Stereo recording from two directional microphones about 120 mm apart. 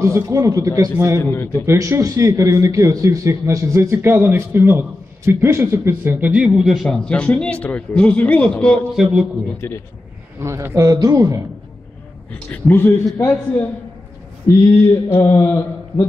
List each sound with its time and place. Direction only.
0.0 s a man's voice: 25° right (ahead or behind)
1.3 s mantra: 20° left (ahead or behind)
1.7 s a man's voice: 25° right (ahead or behind); by 8.8 s 10° left (ahead or behind)
8.9 s a man's voice: 5° right (ahead or behind)
9.6 s a man's voice: 15° left (ahead or behind)
10.4 s a man's voice: 25° right (ahead or behind)
12.4 s a man's voice: 15° left (ahead or behind)
15.0 s mantra: 20° left (ahead or behind)